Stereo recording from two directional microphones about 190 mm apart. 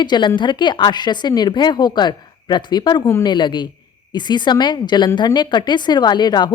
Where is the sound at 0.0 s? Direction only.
25° left (ahead or behind).